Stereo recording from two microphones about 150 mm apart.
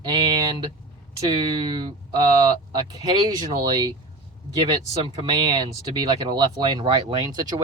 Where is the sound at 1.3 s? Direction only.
35° right (ahead or behind).